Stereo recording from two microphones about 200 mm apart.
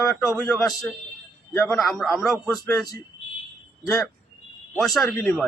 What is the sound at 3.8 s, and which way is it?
Speech, 15° left (ahead or behind).